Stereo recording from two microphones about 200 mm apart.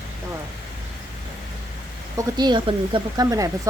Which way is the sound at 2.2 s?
20° right (ahead or behind).